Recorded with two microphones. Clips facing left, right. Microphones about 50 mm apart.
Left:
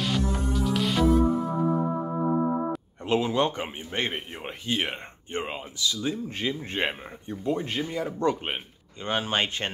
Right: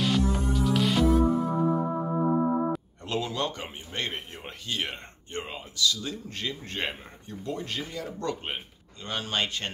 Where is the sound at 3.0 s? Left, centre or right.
Left.